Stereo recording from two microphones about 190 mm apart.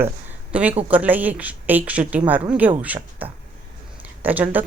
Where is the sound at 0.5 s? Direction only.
5° right (ahead or behind).